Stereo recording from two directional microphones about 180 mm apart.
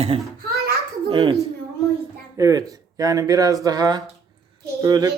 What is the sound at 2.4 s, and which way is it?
A man's voice, 20° right (ahead or behind).